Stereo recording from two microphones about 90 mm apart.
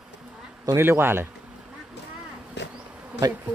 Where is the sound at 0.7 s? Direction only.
25° right (ahead or behind).